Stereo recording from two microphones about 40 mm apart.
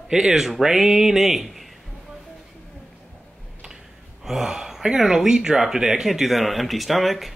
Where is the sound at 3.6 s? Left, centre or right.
Centre.